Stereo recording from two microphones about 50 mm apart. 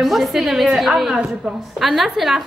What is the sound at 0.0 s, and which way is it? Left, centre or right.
Speech, centre.